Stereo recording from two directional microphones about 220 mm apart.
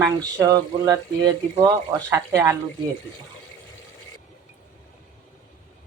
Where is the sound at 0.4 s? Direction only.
15° right (ahead or behind).